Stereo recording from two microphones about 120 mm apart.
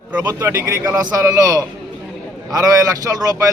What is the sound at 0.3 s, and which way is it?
A man's voice, 20° right (ahead or behind).